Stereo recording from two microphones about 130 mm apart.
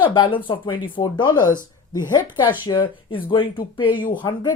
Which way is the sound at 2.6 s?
40° left (ahead or behind).